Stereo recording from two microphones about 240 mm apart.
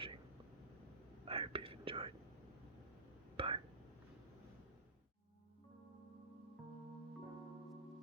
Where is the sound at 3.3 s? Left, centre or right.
Right.